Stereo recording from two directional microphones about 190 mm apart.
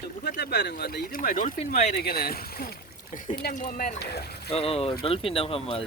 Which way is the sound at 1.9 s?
55° left (ahead or behind).